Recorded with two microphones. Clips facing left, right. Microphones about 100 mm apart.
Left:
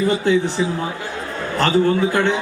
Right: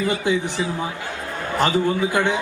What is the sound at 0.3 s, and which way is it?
A man's voice, 15° right (ahead or behind).